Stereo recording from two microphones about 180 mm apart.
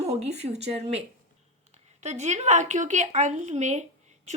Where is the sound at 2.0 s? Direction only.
40° right (ahead or behind).